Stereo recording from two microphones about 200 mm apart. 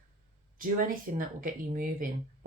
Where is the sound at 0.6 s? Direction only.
45° right (ahead or behind).